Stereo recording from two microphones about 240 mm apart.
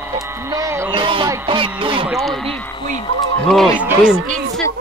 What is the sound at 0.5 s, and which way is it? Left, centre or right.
Speech, centre.